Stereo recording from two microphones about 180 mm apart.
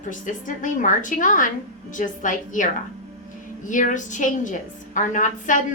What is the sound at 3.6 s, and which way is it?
A woman's voice, 45° left (ahead or behind).